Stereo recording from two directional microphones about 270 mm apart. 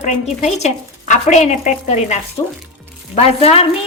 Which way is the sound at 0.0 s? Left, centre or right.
Left.